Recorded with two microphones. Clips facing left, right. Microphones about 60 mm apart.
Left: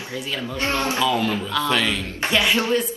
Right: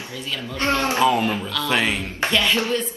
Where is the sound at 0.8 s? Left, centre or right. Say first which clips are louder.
Right 3 dB; right.